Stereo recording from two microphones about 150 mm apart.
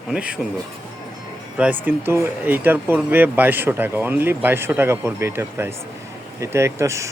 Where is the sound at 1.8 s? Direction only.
15° right (ahead or behind).